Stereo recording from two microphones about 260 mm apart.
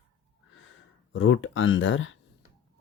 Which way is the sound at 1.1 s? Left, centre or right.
Left.